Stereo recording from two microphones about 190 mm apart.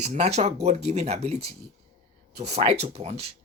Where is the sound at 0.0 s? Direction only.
35° right (ahead or behind).